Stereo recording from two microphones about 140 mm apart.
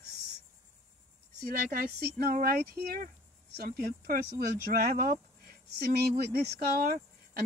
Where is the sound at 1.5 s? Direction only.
85° right.